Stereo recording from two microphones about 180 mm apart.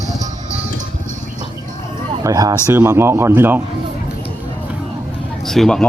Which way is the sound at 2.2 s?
20° right (ahead or behind).